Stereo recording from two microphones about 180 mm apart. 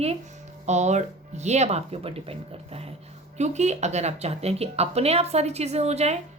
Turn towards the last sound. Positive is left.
turn(degrees=-35)  # may be behind; listen again after turning